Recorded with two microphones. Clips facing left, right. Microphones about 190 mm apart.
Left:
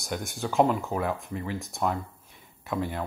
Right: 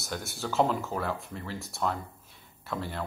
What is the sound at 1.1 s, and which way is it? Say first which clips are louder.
Speech: left 5 dB; centre (ahead or behind).